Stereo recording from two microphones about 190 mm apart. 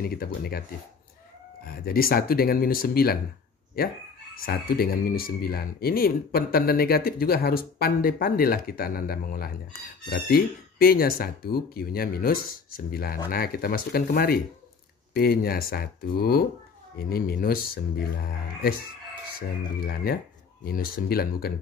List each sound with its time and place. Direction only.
0.1 s speech: 55° left (ahead or behind)
1.7 s speech: 55° left (ahead or behind)
4.4 s speech: 55° left (ahead or behind)
19.8 s speech: 50° left (ahead or behind)